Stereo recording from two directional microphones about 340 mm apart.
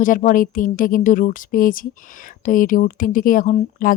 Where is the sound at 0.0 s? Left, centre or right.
Left.